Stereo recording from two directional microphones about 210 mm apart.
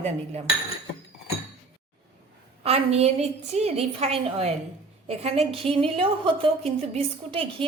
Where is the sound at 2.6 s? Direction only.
30° right (ahead or behind).